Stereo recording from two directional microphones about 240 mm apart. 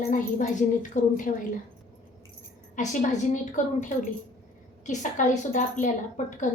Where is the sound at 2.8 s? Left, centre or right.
Left.